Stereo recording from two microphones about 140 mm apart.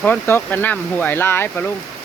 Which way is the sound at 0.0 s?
15° left (ahead or behind).